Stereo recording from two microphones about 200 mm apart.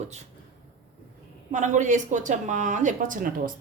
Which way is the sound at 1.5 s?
40° right (ahead or behind).